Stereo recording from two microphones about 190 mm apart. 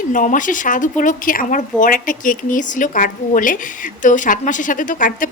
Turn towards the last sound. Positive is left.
turn(degrees=45)  # may be behind; listen again after turning